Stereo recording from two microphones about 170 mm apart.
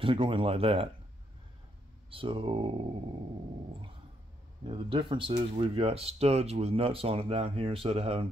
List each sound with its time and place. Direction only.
0.0 s speech: 30° right (ahead or behind)
2.0 s speech: 30° right (ahead or behind)
4.6 s speech: 30° right (ahead or behind)